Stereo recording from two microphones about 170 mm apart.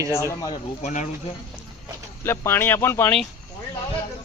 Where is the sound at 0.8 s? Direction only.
45° left (ahead or behind).